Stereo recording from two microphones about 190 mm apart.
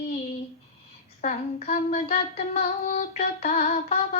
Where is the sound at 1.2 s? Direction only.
40° left (ahead or behind).